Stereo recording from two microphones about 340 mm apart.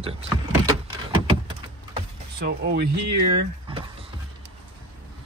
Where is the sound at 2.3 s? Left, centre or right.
Right.